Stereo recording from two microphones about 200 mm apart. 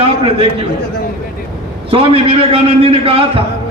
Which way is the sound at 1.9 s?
30° right (ahead or behind).